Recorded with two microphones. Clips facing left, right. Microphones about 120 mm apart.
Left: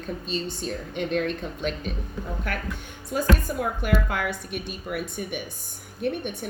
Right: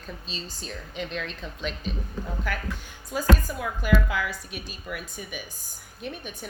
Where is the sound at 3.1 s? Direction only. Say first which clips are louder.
Left 1 dB; 55° left (ahead or behind).